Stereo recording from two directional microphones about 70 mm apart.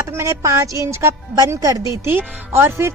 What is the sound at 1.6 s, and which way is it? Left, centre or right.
Speech, right.